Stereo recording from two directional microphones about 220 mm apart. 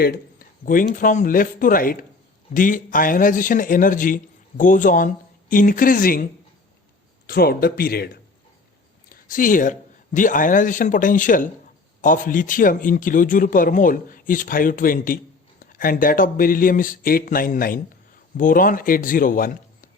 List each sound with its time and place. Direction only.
0.0 s a man's voice: 45° left (ahead or behind)
7.3 s a man's voice: 45° left (ahead or behind)